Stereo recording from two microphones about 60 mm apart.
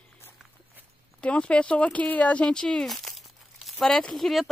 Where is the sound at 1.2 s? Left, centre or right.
Left.